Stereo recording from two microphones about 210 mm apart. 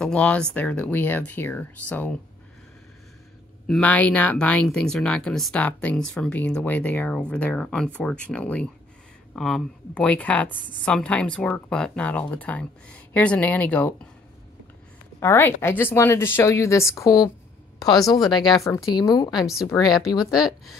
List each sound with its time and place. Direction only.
0.0 s speech: 5° left (ahead or behind)
3.6 s speech: 5° left (ahead or behind)
15.1 s speech: 10° left (ahead or behind)
19.4 s speech: centre (ahead or behind)
20.0 s speech: 20° left (ahead or behind)
20.2 s speech: centre (ahead or behind)